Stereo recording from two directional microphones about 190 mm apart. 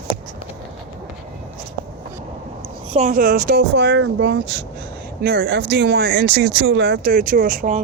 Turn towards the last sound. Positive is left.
turn(degrees=-45)  # may be behind; listen again after turning